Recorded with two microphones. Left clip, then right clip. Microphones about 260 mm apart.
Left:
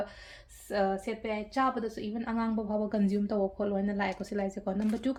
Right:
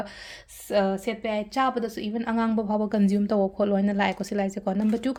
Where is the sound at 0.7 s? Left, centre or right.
Right.